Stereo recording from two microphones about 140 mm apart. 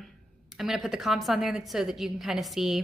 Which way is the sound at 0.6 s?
5° right (ahead or behind).